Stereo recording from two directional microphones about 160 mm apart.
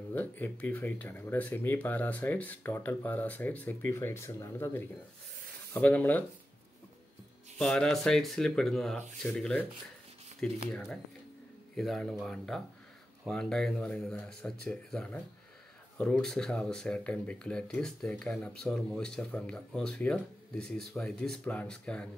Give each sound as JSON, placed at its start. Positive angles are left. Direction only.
{"t": 0.1, "sound": "speech", "side_deg": 10}
{"t": 7.5, "sound": "speech", "side_deg": 5}
{"t": 10.7, "sound": "speech", "side_deg": 5}